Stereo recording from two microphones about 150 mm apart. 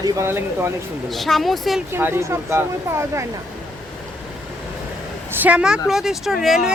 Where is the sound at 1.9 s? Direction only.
15° right (ahead or behind).